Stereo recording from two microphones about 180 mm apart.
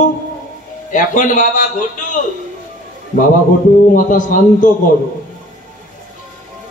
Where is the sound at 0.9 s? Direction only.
45° left (ahead or behind).